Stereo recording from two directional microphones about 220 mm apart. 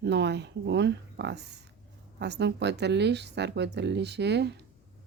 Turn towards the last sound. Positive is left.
turn(degrees=-50)  # may be behind; listen again after turning